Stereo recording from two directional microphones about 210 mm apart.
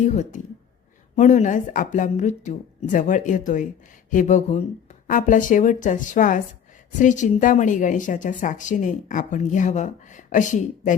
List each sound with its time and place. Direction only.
0.0 s a woman's voice: 35° left (ahead or behind)